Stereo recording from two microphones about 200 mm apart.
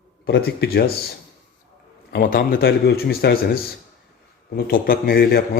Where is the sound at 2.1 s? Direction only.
50° left (ahead or behind).